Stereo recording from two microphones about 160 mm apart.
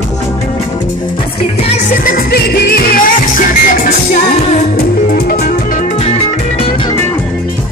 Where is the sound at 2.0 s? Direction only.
65° left (ahead or behind).